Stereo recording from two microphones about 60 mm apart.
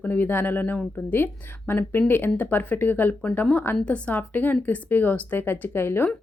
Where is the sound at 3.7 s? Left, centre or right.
Centre; by 6.1 s left.